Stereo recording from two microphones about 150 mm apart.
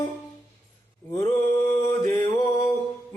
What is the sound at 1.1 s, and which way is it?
Mantra, 20° left (ahead or behind).